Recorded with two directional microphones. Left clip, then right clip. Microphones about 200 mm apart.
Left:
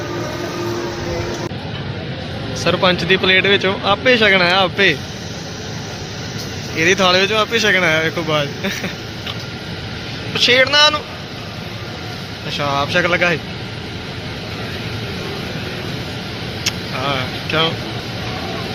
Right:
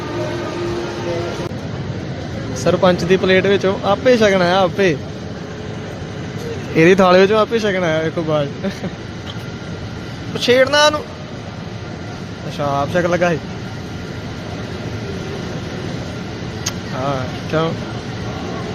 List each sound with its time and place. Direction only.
2.6 s speech: 20° right (ahead or behind)
6.7 s speech: 40° right (ahead or behind)
7.5 s speech: 15° right (ahead or behind)
10.3 s speech: 25° right (ahead or behind)
12.5 s speech: 20° right (ahead or behind)
16.6 s vehicle: 20° right (ahead or behind)